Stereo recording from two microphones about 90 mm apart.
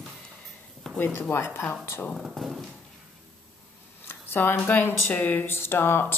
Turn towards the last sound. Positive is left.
turn(degrees=25)  # may be behind; listen again after turning